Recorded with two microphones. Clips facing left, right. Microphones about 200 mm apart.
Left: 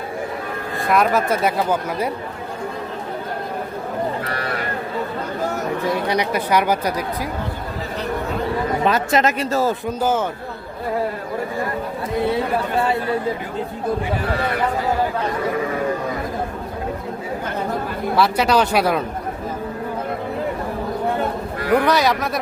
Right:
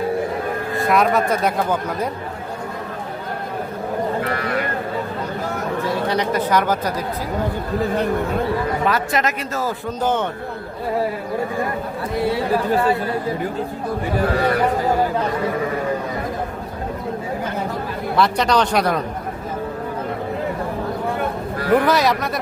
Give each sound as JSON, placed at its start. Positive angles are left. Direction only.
{"t": 0.8, "sound": "speech", "side_deg": 0}
{"t": 6.1, "sound": "speech", "side_deg": 10}
{"t": 8.8, "sound": "speech", "side_deg": 25}
{"t": 10.0, "sound": "speech", "side_deg": 5}
{"t": 18.2, "sound": "speech", "side_deg": 5}
{"t": 21.7, "sound": "speech", "side_deg": 0}